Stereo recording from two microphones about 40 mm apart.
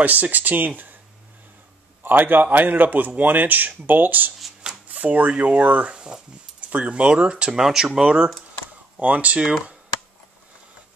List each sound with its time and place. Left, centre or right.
0.0 s speech: right
2.0 s a man's voice: right
4.8 s a sound: right
5.4 s speech: right
5.9 s speech: right
7.5 s speech: centre
9.0 s speech: right